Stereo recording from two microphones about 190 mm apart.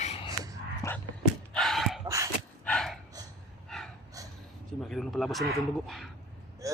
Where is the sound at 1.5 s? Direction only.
Centre (ahead or behind).